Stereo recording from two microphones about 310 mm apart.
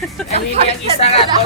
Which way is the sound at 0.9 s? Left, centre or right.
Centre.